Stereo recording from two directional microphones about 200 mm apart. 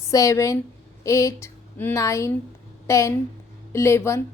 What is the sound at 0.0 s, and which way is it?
A woman's voice, 15° left (ahead or behind).